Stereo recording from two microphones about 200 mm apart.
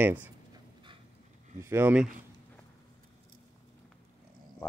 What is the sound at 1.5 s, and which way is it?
Speech, 15° right (ahead or behind).